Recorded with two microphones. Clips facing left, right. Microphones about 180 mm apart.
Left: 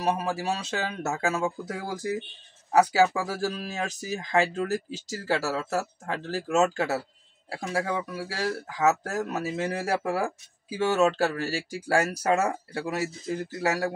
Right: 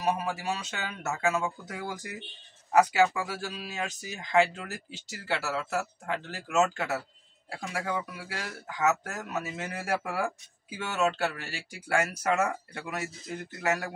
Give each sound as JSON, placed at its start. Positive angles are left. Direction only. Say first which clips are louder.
{"t": 0.0, "sound": "speech", "louder": "left 3 dB", "side_deg": 35}